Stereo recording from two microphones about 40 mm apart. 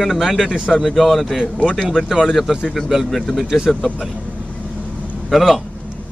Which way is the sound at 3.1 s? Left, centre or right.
Centre.